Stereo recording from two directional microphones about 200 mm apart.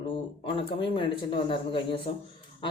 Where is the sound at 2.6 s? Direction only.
25° left (ahead or behind).